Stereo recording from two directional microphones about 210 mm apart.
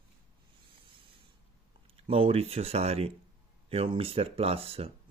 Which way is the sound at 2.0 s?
25° right (ahead or behind).